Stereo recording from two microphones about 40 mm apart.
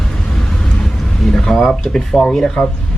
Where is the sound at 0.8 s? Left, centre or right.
Centre.